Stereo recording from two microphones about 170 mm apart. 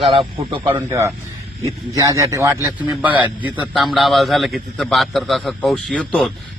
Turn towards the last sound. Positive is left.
turn(degrees=5)  # may be behind; listen again after turning